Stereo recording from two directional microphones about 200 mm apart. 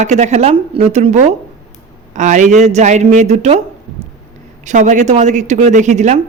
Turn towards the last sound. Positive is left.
turn(degrees=-35)  # may be behind; listen again after turning